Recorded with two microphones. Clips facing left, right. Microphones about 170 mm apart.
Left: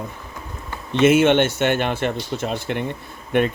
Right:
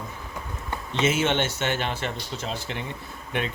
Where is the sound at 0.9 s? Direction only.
60° left (ahead or behind).